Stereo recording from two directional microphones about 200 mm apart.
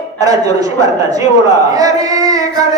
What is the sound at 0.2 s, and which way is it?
Speech, 20° right (ahead or behind).